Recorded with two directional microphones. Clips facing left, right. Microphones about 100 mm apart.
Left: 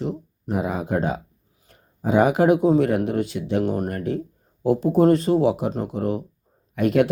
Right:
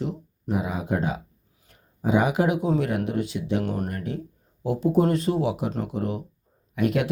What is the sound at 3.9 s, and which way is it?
Speech, 45° left (ahead or behind).